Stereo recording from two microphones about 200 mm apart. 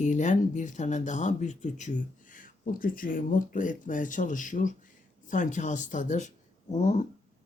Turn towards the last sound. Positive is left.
turn(degrees=35)  # may be behind; listen again after turning